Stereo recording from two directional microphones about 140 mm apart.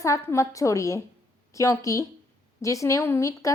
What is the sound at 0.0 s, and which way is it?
A woman's voice, 20° left (ahead or behind).